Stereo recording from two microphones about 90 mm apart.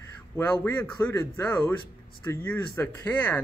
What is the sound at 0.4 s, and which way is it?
A man's voice, 20° left (ahead or behind).